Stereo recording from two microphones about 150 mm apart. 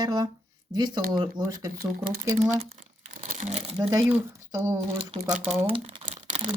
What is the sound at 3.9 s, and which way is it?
Speech, 15° right (ahead or behind).